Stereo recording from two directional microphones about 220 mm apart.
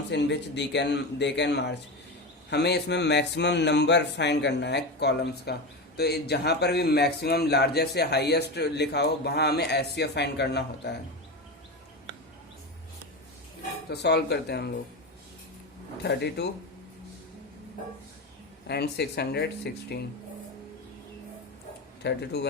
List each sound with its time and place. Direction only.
0.1 s speech: 50° left (ahead or behind)
13.9 s speech: 50° left (ahead or behind)
16.0 s speech: 50° left (ahead or behind)
18.7 s speech: 50° left (ahead or behind)
22.0 s speech: 50° left (ahead or behind)